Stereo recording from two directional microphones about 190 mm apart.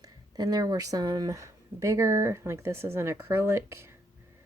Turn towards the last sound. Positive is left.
turn(degrees=-15)  # may be behind; listen again after turning